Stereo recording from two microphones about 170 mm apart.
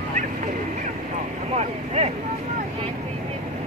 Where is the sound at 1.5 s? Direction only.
40° right (ahead or behind).